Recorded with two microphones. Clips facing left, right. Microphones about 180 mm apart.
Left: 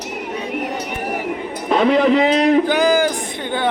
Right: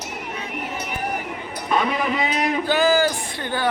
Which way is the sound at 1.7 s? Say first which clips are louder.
Left 8 dB; 70° left (ahead or behind).